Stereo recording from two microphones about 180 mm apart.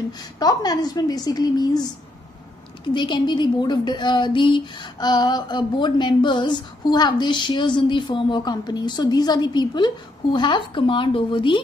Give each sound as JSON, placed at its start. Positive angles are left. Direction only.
{"t": 0.4, "sound": "a woman's voice", "side_deg": 20}
{"t": 2.9, "sound": "a woman's voice", "side_deg": 25}